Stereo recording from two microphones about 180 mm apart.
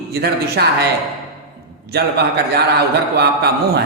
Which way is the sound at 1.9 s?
65° right (ahead or behind).